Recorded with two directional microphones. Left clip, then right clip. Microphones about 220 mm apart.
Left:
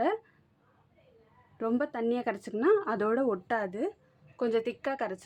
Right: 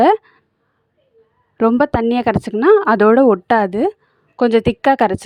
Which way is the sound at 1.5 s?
40° right (ahead or behind).